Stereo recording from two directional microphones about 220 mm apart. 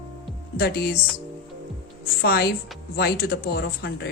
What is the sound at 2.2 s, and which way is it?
Speech, 45° left (ahead or behind).